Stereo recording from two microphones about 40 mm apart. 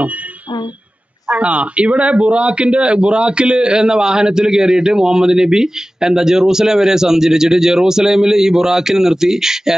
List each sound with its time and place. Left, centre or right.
1.3 s a man's voice: right; by 9.8 s centre